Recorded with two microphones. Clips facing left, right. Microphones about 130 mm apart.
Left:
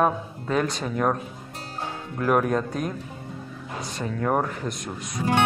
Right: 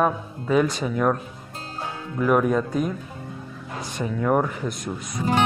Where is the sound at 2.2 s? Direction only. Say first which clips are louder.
Right 2 dB; centre (ahead or behind).